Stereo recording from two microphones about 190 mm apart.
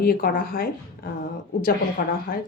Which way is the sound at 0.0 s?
50° left (ahead or behind).